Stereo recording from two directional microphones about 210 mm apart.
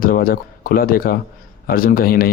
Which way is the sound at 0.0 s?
40° left (ahead or behind).